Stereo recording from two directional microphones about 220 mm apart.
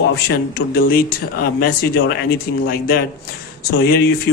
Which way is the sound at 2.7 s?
45° left (ahead or behind).